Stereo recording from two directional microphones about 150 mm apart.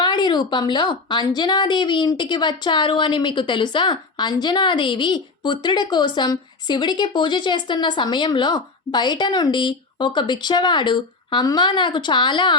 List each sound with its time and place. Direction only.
0.0 s a woman's voice: 30° left (ahead or behind)